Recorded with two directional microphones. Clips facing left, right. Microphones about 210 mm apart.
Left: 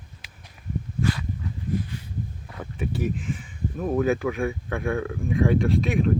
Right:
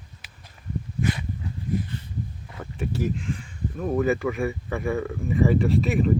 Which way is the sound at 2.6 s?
Centre (ahead or behind).